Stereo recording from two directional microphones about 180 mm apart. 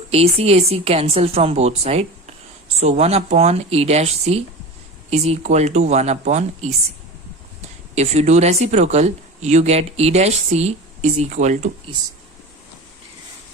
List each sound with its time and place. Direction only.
0.1 s speech: 35° right (ahead or behind)
7.9 s speech: 35° right (ahead or behind)